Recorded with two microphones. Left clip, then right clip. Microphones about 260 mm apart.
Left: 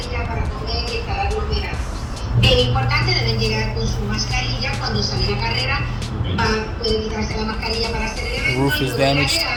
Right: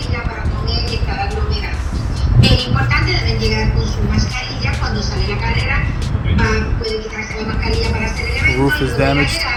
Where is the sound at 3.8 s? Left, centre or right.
Left.